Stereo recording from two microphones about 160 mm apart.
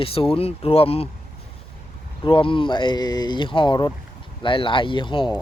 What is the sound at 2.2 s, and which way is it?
Speech, 30° left (ahead or behind).